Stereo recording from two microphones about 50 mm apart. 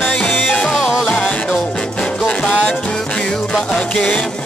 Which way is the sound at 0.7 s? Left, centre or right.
Centre.